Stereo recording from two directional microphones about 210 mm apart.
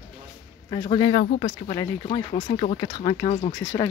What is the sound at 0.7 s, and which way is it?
Speech, 20° left (ahead or behind).